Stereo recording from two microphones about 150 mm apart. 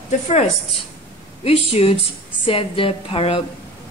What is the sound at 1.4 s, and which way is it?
Speech, 40° left (ahead or behind).